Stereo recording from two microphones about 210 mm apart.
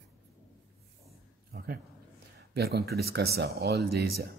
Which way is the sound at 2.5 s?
50° right (ahead or behind).